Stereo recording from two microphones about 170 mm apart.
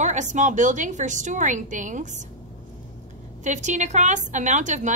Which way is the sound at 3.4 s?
45° right (ahead or behind).